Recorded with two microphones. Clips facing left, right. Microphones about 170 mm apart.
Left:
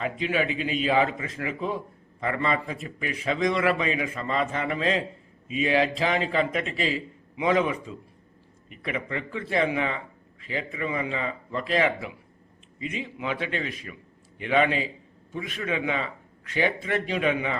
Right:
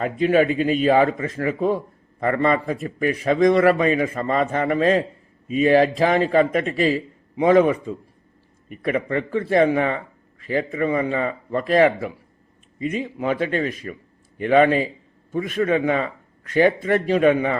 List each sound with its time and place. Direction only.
0.0 s a man's voice: 45° right (ahead or behind)